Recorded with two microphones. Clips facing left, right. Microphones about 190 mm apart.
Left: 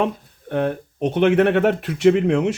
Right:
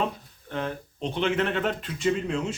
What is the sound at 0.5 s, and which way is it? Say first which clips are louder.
Speech: left 9 dB; 55° left (ahead or behind).